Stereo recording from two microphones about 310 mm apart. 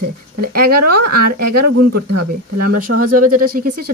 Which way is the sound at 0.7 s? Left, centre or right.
Right.